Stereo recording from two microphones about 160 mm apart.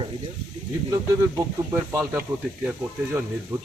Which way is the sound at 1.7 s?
15° right (ahead or behind).